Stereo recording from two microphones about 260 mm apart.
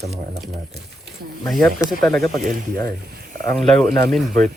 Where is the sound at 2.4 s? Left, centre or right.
Right.